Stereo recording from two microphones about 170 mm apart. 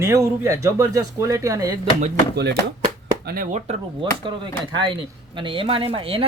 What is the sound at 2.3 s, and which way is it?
Speech, 75° right (ahead or behind).